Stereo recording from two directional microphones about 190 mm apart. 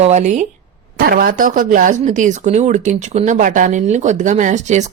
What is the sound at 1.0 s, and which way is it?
Speech, 50° right (ahead or behind).